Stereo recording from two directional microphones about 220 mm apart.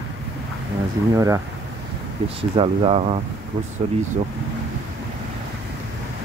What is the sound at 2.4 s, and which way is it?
Speech, 25° right (ahead or behind).